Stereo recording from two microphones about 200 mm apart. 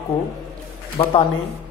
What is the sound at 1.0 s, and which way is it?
Speech, 25° left (ahead or behind).